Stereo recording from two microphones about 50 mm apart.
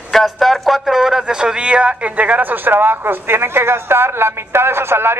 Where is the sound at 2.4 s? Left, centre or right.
Right.